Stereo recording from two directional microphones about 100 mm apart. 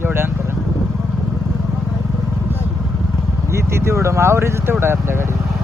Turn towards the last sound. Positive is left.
turn(degrees=-25)  # may be behind; listen again after turning